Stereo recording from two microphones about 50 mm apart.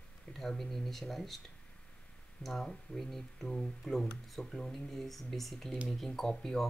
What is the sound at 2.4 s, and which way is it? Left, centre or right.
Speech, centre.